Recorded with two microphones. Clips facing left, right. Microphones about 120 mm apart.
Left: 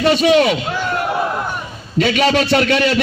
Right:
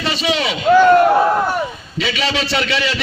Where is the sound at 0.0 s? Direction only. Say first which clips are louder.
Left 7 dB; 50° left (ahead or behind).